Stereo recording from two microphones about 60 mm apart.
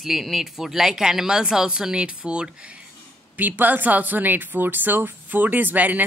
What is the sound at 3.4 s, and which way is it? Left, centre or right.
Speech, right.